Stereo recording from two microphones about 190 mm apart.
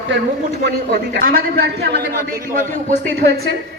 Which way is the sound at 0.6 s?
55° right (ahead or behind).